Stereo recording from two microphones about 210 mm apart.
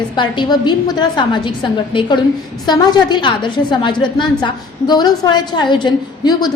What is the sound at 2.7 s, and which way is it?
A woman's voice, 20° left (ahead or behind).